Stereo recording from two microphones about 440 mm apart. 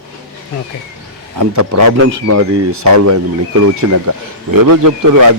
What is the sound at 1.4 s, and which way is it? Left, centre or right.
A man's voice, right.